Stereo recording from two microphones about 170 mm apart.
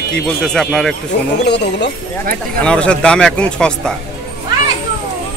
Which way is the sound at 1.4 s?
85° left.